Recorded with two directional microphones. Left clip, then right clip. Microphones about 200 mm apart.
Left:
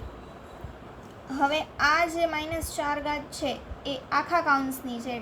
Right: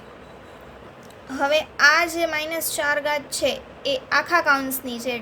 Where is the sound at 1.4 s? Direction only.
60° right (ahead or behind).